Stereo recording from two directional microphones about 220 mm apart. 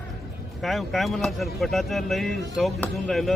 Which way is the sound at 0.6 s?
Centre (ahead or behind).